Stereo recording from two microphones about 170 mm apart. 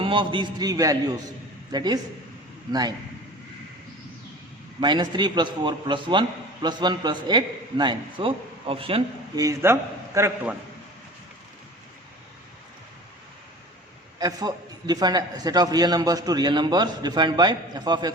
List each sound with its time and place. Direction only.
0.0 s a man's voice: 30° right (ahead or behind)
4.8 s a man's voice: 25° right (ahead or behind)
9.4 s a man's voice: 15° right (ahead or behind)
14.2 s a man's voice: 20° right (ahead or behind)